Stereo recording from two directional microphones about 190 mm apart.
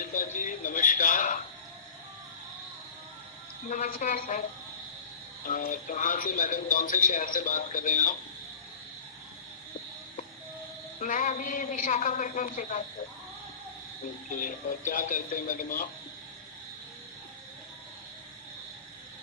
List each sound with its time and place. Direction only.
0.0 s a sound: 45° left (ahead or behind)
3.7 s speech: 45° left (ahead or behind)
5.5 s speech: 45° left (ahead or behind)
11.0 s speech: 45° left (ahead or behind)
14.3 s speech: 45° left (ahead or behind)